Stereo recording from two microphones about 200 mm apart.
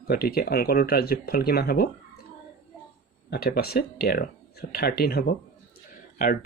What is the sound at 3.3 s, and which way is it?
Speech, 50° left (ahead or behind).